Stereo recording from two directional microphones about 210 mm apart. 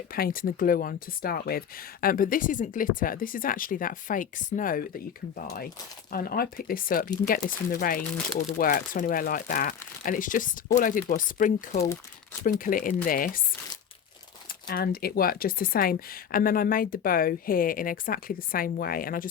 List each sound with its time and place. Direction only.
0.1 s speech: 45° left (ahead or behind)
6.1 s a woman's voice: 45° left (ahead or behind)
14.7 s a woman's voice: 45° left (ahead or behind)